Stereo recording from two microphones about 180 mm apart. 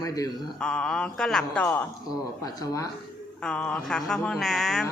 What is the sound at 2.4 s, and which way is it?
Speech, 20° left (ahead or behind).